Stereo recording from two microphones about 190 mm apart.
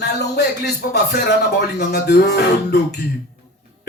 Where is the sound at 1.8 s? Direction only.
60° left (ahead or behind).